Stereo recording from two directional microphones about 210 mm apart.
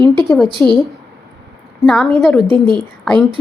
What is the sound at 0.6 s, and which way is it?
Speech, 10° left (ahead or behind).